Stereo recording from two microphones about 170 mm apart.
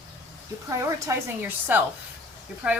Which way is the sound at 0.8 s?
20° right (ahead or behind).